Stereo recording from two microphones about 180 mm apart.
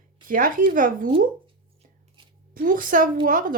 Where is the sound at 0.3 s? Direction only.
50° right (ahead or behind).